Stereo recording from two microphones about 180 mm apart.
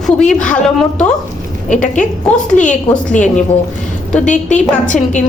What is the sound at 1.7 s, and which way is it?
A woman's voice, 45° left (ahead or behind).